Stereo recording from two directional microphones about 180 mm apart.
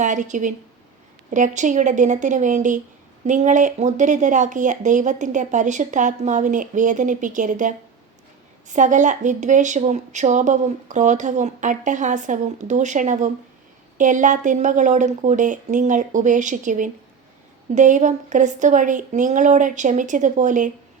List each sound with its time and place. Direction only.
0.0 s a woman's voice: 45° right (ahead or behind)
8.7 s a woman's voice: 45° right (ahead or behind)